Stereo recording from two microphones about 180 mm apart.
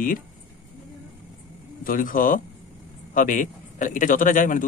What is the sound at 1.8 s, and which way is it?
A man's voice, 50° left (ahead or behind).